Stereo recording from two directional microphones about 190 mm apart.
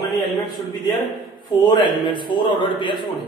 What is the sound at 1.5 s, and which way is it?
A man's voice, 25° left (ahead or behind).